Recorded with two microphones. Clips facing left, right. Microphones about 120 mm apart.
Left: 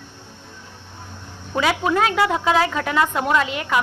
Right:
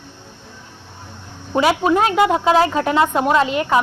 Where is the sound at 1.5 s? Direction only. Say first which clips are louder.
Right 4 dB; 20° right (ahead or behind).